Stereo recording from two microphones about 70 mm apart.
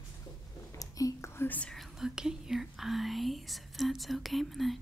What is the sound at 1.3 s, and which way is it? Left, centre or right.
Whispering, left.